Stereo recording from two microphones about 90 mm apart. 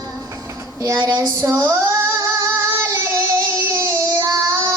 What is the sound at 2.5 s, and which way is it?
Music, 30° right (ahead or behind).